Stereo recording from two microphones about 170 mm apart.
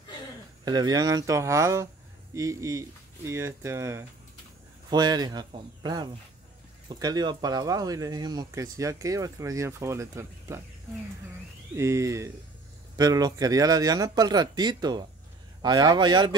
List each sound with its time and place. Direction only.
0.7 s speech: 25° right (ahead or behind)
11.7 s speech: 15° right (ahead or behind)